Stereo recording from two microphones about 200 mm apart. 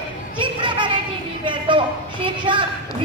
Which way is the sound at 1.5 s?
25° right (ahead or behind).